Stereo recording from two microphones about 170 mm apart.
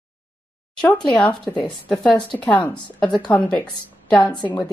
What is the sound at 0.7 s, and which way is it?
Speech, 5° left (ahead or behind).